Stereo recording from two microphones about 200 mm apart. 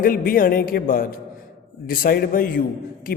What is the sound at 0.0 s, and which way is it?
A man's voice, 45° left (ahead or behind).